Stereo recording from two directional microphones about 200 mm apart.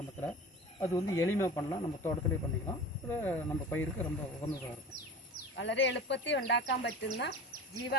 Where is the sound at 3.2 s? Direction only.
10° left (ahead or behind).